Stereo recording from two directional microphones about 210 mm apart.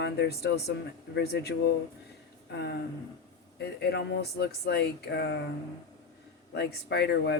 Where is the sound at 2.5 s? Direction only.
50° left (ahead or behind).